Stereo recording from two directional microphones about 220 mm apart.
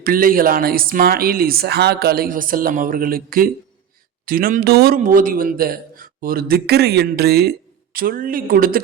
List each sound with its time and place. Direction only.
0.0 s speech: 40° right (ahead or behind)